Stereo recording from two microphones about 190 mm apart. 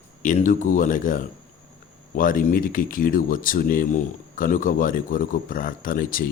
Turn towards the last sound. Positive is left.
turn(degrees=45)  # may be behind; listen again after turning